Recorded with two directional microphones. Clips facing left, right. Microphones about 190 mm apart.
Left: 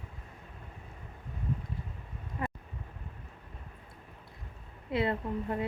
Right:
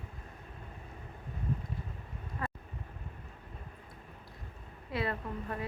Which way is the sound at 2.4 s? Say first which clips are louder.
Left 3 dB; 20° left (ahead or behind).